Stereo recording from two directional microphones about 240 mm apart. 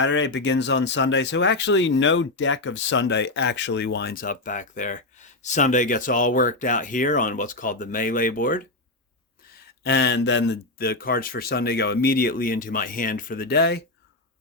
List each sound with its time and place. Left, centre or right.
0.0 s speech: left
9.8 s speech: left